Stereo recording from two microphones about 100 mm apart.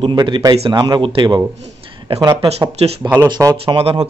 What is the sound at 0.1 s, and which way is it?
Speech, 45° right (ahead or behind).